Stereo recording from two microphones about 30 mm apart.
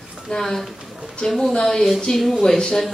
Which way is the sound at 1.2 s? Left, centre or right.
Left.